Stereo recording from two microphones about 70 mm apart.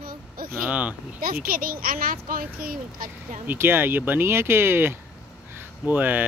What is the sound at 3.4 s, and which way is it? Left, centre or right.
Speech, right.